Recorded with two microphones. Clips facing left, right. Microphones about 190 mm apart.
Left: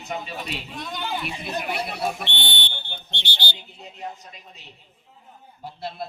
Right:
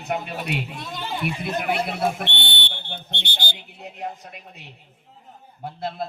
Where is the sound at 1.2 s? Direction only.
55° right (ahead or behind).